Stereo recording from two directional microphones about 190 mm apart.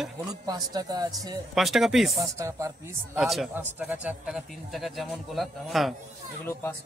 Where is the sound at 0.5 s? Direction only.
20° right (ahead or behind).